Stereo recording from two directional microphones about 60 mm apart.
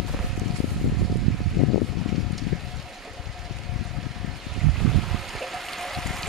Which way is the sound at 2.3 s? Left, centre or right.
Centre.